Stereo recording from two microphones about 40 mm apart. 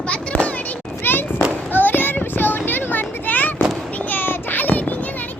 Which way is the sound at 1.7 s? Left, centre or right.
Left.